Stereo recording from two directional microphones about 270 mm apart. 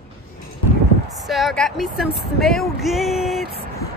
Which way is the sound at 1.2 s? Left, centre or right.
Centre.